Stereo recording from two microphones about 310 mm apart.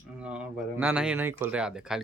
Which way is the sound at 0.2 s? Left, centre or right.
Centre.